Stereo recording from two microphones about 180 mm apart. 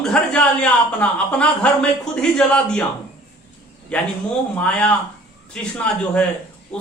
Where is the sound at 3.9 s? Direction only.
5° left (ahead or behind).